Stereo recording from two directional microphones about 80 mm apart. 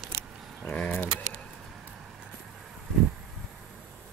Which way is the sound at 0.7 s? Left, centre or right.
Left.